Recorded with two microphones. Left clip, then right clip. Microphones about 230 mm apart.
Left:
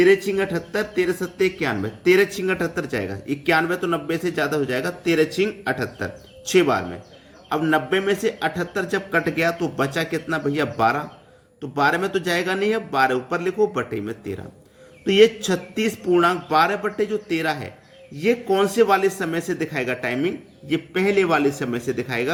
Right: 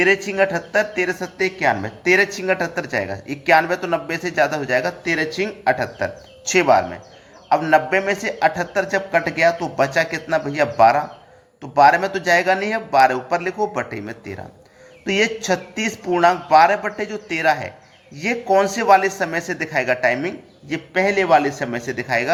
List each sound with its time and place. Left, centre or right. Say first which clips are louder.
0.0 s speech: right 1 dB; centre